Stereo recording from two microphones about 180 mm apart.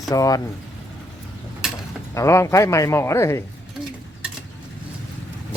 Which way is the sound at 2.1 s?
15° left (ahead or behind).